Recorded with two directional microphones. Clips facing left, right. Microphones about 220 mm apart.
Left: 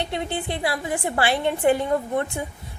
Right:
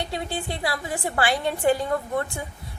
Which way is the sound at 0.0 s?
20° left (ahead or behind).